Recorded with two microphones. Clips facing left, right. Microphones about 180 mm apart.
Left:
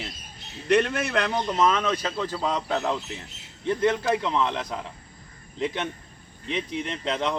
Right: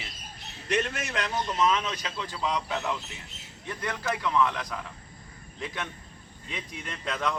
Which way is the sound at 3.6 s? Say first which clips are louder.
Left 9 dB; 25° left (ahead or behind).